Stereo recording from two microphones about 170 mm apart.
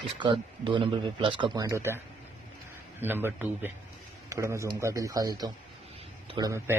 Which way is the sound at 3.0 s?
10° right (ahead or behind).